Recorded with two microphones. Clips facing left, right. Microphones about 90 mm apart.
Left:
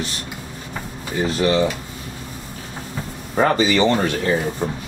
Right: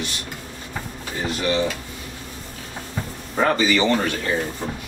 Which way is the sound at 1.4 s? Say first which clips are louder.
Left 4 dB; 35° left (ahead or behind).